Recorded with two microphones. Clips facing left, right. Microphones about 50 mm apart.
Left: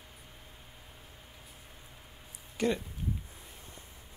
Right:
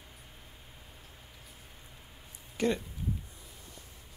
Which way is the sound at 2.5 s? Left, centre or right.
Centre.